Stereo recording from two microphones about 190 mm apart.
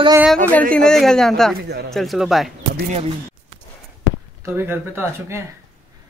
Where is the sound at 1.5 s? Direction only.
55° right (ahead or behind).